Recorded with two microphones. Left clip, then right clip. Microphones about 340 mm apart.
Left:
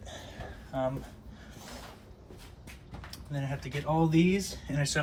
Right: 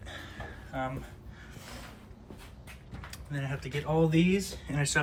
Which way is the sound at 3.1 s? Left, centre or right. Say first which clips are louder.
Even; centre.